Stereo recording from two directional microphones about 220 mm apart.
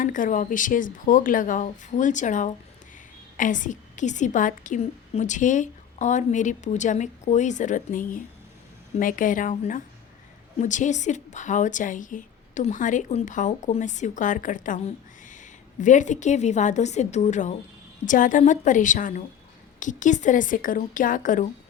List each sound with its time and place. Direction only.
0.0 s a woman's voice: 35° left (ahead or behind)